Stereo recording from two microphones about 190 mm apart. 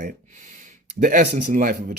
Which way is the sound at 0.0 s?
45° right (ahead or behind).